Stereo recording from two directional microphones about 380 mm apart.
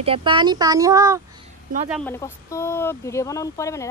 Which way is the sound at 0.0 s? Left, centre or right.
Centre.